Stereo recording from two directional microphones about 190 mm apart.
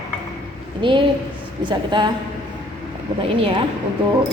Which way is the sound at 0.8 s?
25° right (ahead or behind).